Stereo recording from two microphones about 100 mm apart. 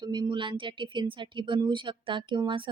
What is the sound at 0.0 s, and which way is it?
A woman's voice, 50° right (ahead or behind).